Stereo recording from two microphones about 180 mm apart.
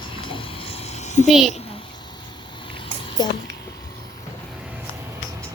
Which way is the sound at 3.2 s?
20° left (ahead or behind).